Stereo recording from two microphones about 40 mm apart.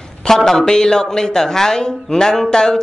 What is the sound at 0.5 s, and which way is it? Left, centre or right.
Speech, centre.